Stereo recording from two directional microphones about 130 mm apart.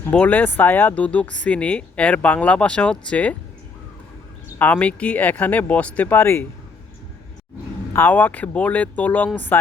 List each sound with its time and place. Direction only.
0.0 s speech: 10° left (ahead or behind)
4.5 s speech: 15° left (ahead or behind)
7.9 s speech: 15° left (ahead or behind)